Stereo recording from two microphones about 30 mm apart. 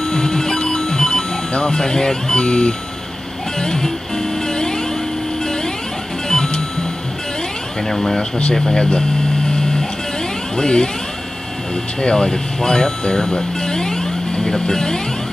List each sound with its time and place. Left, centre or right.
0.0 s music: centre
1.6 s speech: left
4.5 s vehicle: left
6.2 s music: left
7.9 s speech: centre
9.5 s music: left
10.5 s speech: left
13.3 s vehicle: left